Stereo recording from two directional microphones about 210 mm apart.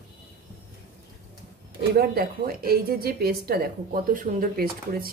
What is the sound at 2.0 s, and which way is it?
Speech, 45° right (ahead or behind).